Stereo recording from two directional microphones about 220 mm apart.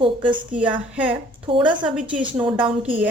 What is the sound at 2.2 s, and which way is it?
Speech, 20° right (ahead or behind).